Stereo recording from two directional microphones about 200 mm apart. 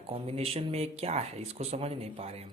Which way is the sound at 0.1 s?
30° right (ahead or behind).